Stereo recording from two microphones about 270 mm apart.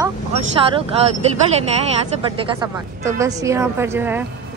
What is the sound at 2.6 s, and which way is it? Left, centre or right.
A woman's voice, centre.